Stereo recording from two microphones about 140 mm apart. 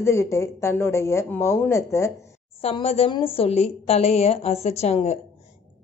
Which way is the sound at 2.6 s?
45° left (ahead or behind).